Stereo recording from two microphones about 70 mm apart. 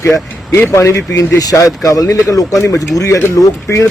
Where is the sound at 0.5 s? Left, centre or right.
Left.